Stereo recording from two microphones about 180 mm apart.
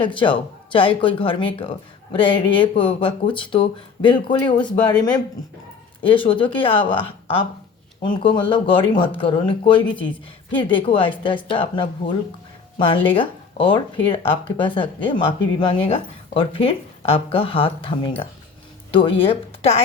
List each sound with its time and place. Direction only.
0.0 s speech: 25° left (ahead or behind)